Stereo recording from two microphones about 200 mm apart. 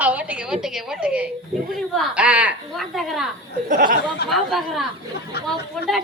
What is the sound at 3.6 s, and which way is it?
Speech, 45° right (ahead or behind).